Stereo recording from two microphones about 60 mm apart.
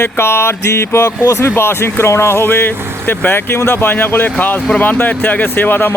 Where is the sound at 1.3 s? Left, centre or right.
Left.